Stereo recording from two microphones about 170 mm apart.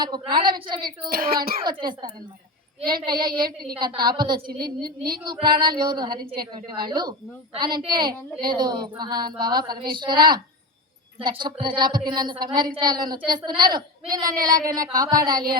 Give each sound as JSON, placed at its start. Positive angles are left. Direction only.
{"t": 0.0, "sound": "a woman's voice", "side_deg": -25}
{"t": 0.9, "sound": "speech", "side_deg": -60}
{"t": 1.6, "sound": "a woman's voice", "side_deg": -25}